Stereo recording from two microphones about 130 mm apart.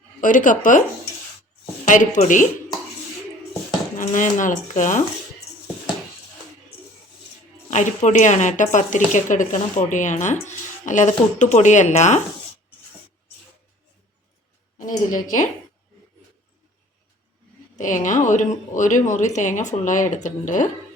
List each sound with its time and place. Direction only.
0.2 s speech: 90° left
1.8 s speech: 75° left (ahead or behind)
3.9 s speech: 75° left (ahead or behind)
7.7 s speech: 65° left (ahead or behind)
14.8 s speech: 80° left
17.7 s speech: 75° left (ahead or behind)